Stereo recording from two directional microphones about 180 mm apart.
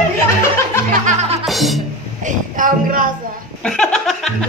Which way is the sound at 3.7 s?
5° left (ahead or behind).